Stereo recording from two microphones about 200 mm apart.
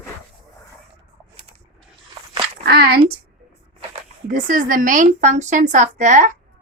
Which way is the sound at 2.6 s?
50° right (ahead or behind).